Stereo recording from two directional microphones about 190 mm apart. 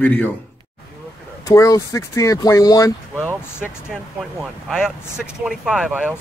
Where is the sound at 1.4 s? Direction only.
15° left (ahead or behind).